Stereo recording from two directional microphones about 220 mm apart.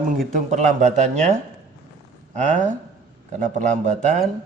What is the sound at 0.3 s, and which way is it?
Mantra, 35° right (ahead or behind).